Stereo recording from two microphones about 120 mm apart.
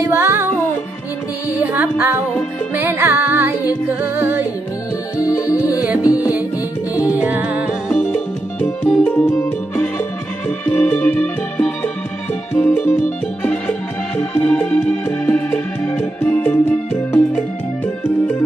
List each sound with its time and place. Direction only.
0.0 s music: 20° right (ahead or behind)
1.6 s music: 15° right (ahead or behind)
5.1 s music: 25° left (ahead or behind)
7.1 s music: 15° right (ahead or behind)
7.9 s music: 5° left (ahead or behind)